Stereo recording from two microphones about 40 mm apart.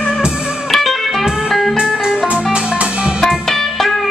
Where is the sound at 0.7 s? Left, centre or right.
Centre.